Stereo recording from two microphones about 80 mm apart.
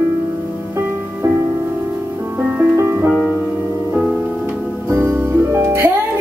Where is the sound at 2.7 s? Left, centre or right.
Right.